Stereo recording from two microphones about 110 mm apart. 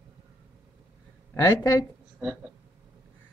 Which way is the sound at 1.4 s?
30° left (ahead or behind).